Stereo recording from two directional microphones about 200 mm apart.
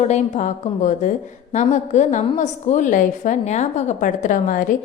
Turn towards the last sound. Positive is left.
turn(degrees=40)  # may be behind; listen again after turning